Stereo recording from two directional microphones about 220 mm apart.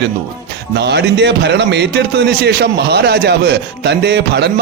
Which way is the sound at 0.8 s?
50° right (ahead or behind).